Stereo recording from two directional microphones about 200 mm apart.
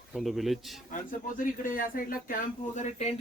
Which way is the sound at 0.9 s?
45° left (ahead or behind).